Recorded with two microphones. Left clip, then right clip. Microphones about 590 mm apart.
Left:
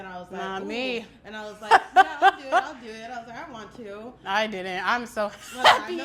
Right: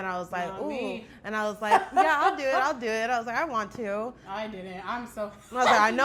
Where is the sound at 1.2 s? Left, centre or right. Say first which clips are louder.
Right 8 dB; right.